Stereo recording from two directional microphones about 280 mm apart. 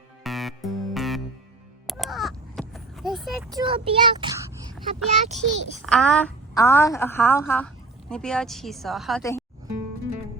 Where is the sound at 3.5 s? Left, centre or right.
Centre.